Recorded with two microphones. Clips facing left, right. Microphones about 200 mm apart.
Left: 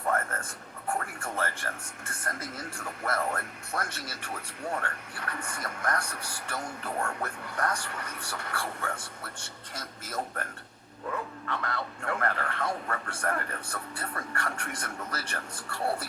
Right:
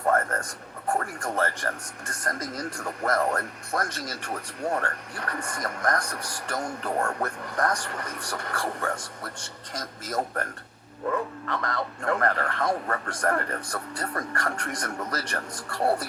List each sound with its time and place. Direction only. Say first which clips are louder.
0.1 s speech: right 6 dB; 40° right (ahead or behind)